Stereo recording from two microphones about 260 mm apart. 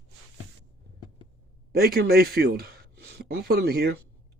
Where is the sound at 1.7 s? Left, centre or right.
Right.